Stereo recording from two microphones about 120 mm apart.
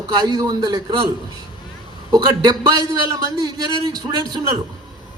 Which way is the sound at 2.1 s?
35° right (ahead or behind).